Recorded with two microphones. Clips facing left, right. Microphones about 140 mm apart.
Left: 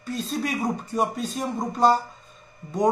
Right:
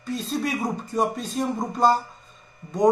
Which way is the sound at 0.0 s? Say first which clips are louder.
Right 1 dB; centre (ahead or behind).